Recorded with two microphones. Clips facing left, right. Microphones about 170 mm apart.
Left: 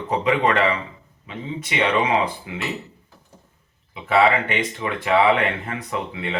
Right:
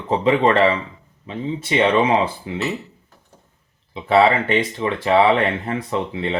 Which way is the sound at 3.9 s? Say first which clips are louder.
Right 3 dB; 30° right (ahead or behind).